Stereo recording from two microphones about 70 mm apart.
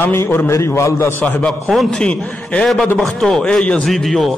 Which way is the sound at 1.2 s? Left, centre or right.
Left.